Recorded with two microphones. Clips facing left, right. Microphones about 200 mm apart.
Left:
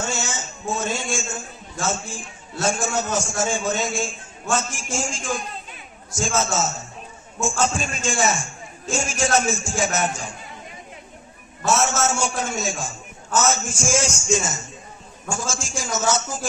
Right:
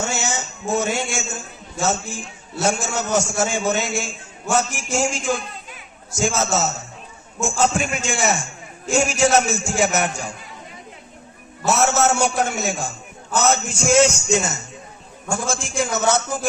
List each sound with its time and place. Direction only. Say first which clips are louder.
0.0 s a sound: right 3 dB; 65° right (ahead or behind)
1.9 s a man's voice: right 3 dB; 70° right (ahead or behind)
11.6 s a man's voice: right 3 dB; 65° right (ahead or behind)